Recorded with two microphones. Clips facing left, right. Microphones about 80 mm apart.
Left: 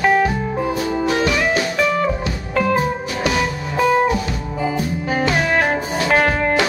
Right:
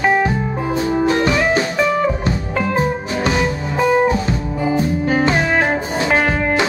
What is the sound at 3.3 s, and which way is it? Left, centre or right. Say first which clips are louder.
Music: right 2 dB; centre.